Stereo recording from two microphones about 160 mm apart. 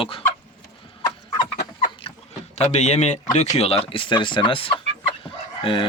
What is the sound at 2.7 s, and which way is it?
Speech, 45° left (ahead or behind).